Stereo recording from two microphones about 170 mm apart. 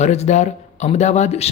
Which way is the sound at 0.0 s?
40° left (ahead or behind).